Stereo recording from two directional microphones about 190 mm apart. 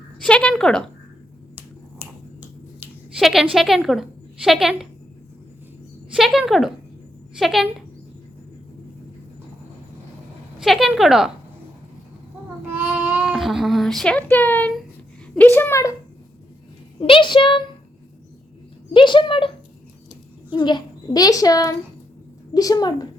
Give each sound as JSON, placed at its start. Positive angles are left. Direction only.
{"t": 0.2, "sound": "speech", "side_deg": 5}
{"t": 2.0, "sound": "a sound", "side_deg": -10}
{"t": 2.8, "sound": "a woman's voice", "side_deg": 0}
{"t": 6.1, "sound": "speech", "side_deg": 0}
{"t": 10.6, "sound": "speech", "side_deg": 0}
{"t": 12.6, "sound": "child singing", "side_deg": -10}
{"t": 13.2, "sound": "speech", "side_deg": 0}
{"t": 15.5, "sound": "a sound", "side_deg": 15}
{"t": 17.0, "sound": "a child's voice", "side_deg": 25}
{"t": 18.9, "sound": "a child's voice", "side_deg": 25}